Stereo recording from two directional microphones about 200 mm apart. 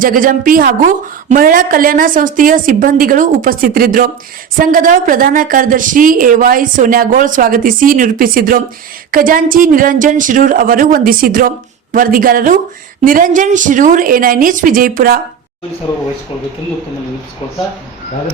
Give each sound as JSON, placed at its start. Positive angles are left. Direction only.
{"t": 0.0, "sound": "a woman's voice", "side_deg": -45}